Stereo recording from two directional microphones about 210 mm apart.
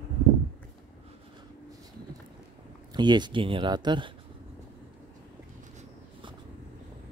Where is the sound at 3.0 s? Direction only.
20° right (ahead or behind).